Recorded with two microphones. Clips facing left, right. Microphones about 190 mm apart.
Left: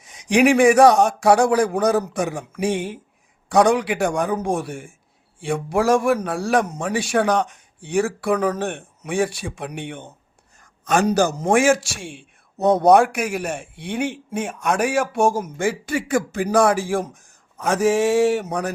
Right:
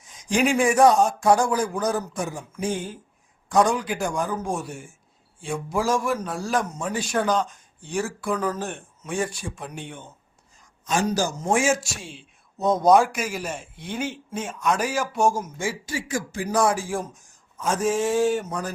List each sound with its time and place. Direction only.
0.0 s a man's voice: 70° left (ahead or behind)
5.4 s a man's voice: 70° left (ahead or behind)